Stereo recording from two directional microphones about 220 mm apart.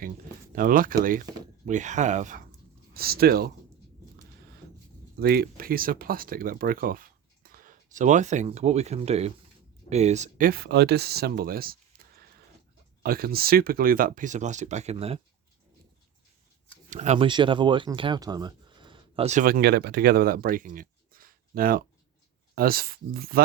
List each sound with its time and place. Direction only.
0.5 s speech: 40° right (ahead or behind)
5.2 s speech: 45° right (ahead or behind)
13.0 s speech: 45° right (ahead or behind); by 15.2 s 25° right (ahead or behind)
16.9 s speech: 30° right (ahead or behind)